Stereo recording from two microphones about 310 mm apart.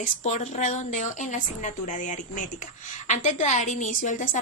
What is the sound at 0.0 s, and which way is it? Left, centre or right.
Speech, left.